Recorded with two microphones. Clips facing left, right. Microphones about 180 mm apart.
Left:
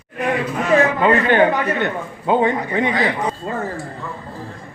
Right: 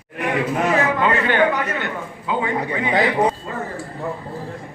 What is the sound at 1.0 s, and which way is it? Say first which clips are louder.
A man's voice: left 3 dB; 35° left (ahead or behind).